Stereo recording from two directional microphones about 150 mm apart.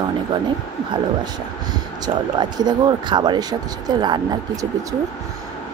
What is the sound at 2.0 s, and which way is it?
Speech, 30° right (ahead or behind).